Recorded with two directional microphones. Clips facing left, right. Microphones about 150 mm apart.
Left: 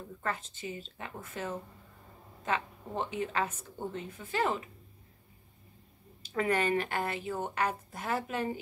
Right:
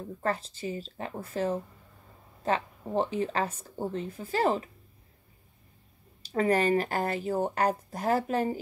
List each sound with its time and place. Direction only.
0.2 s speech: 35° right (ahead or behind)
6.2 s speech: 35° right (ahead or behind)